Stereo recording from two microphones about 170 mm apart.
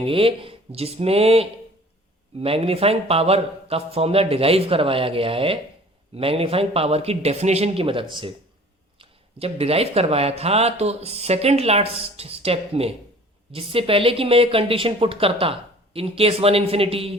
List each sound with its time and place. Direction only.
0.0 s speech: 30° right (ahead or behind)